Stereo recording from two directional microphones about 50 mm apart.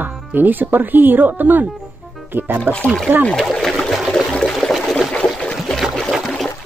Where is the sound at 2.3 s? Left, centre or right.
Right.